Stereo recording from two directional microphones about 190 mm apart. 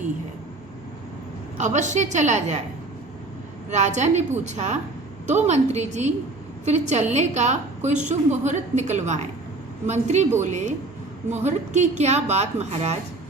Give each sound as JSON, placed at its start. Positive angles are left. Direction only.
{"t": 1.5, "sound": "a woman's voice", "side_deg": -40}
{"t": 3.7, "sound": "a woman's voice", "side_deg": -40}
{"t": 11.4, "sound": "a woman's voice", "side_deg": -35}